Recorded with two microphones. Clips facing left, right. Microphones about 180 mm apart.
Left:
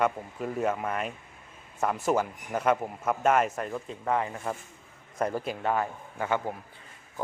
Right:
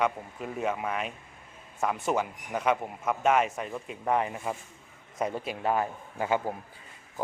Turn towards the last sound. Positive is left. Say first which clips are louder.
# right 1 dB
turn(degrees=-15)  # may be behind; listen again after turning